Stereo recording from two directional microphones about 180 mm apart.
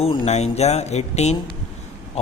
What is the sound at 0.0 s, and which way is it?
A man's voice, 30° left (ahead or behind).